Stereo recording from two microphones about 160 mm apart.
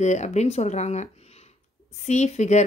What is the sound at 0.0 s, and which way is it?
Speech, 45° left (ahead or behind).